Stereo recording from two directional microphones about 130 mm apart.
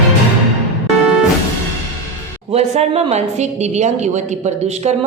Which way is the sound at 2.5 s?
55° right (ahead or behind).